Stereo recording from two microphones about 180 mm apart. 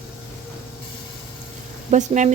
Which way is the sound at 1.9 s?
40° right (ahead or behind).